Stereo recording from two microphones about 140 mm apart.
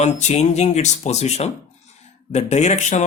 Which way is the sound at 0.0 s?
55° left (ahead or behind).